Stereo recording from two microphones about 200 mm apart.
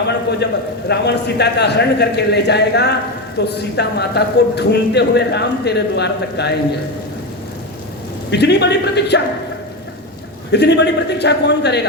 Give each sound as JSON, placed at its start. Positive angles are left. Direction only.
{"t": 0.4, "sound": "speech", "side_deg": 60}
{"t": 8.3, "sound": "speech", "side_deg": 55}
{"t": 10.5, "sound": "speech", "side_deg": 60}